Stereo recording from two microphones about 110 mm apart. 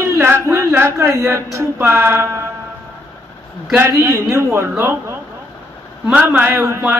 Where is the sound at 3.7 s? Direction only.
25° right (ahead or behind).